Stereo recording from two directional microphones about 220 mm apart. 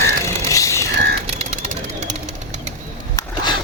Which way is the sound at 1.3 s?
30° right (ahead or behind).